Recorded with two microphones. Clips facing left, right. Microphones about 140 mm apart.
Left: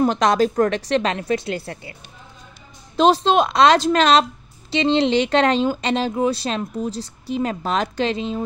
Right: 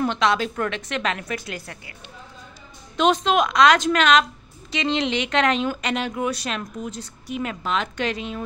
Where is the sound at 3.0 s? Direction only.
30° left (ahead or behind).